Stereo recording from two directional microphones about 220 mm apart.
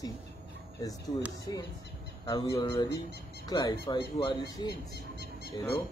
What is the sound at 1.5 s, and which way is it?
Speech, 20° left (ahead or behind).